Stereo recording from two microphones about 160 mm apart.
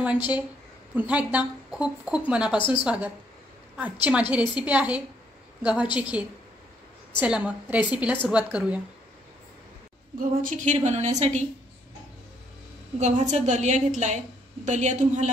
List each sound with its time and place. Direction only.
0.9 s speech: 10° right (ahead or behind)
2.5 s a woman's voice: 30° left (ahead or behind)
2.8 s speech: 5° right (ahead or behind)
10.1 s a woman's voice: 55° right (ahead or behind)
13.0 s a woman's voice: 45° right (ahead or behind)